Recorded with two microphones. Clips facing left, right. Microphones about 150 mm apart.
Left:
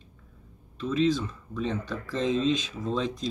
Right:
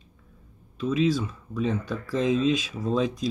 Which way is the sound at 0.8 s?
10° right (ahead or behind).